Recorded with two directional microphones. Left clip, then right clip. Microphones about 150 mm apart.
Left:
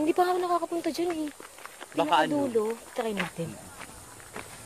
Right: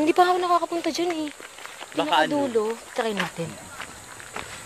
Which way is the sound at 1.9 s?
60° left (ahead or behind).